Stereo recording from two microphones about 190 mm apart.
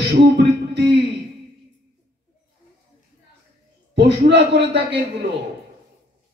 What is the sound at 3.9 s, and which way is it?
Speech, 65° right (ahead or behind).